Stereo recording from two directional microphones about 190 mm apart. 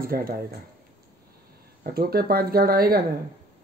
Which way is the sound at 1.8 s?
55° right (ahead or behind).